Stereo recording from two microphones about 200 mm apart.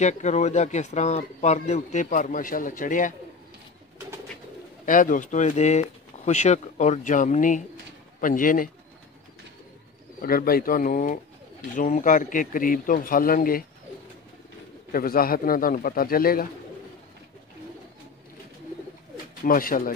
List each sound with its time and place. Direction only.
0.0 s speech: 35° left (ahead or behind)
4.8 s a man's voice: 40° left (ahead or behind)
10.2 s a man's voice: 45° left (ahead or behind)
14.9 s a man's voice: 45° left (ahead or behind)
19.4 s a man's voice: 45° left (ahead or behind)